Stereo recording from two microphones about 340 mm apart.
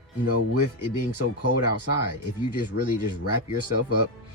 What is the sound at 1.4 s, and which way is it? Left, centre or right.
Speech, left.